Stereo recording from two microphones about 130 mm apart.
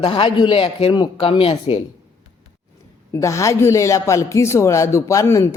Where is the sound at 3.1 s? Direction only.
25° left (ahead or behind).